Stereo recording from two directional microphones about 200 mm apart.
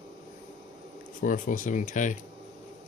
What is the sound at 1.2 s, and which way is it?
Speech, 40° left (ahead or behind).